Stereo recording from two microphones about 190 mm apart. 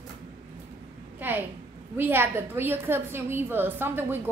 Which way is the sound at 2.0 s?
10° right (ahead or behind).